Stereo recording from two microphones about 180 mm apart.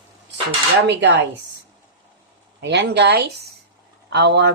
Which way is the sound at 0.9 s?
75° right (ahead or behind).